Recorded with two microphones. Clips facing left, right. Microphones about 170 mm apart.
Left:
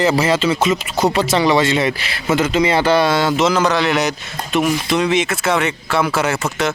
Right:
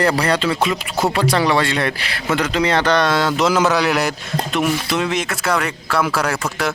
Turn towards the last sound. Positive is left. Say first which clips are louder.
# left 2 dB
turn(degrees=5)  # may be behind; listen again after turning